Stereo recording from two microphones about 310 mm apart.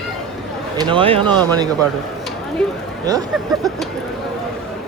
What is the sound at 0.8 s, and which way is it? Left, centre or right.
Speech, centre.